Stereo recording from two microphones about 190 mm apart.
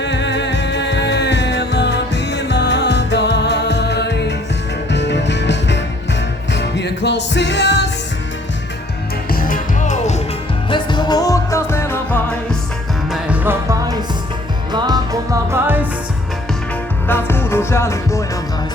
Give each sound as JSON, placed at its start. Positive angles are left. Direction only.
{"t": 0.0, "sound": "music", "side_deg": 70}
{"t": 9.3, "sound": "music", "side_deg": 50}
{"t": 10.7, "sound": "music", "side_deg": 25}
{"t": 13.1, "sound": "music", "side_deg": -5}
{"t": 17.1, "sound": "music", "side_deg": 10}